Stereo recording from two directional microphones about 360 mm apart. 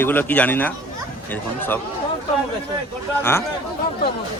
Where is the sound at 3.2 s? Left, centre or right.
Centre.